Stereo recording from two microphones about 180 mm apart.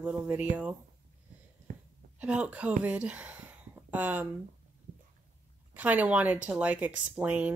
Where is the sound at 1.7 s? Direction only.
50° right (ahead or behind).